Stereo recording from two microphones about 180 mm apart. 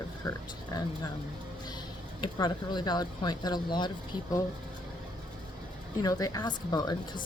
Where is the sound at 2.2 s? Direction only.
25° left (ahead or behind).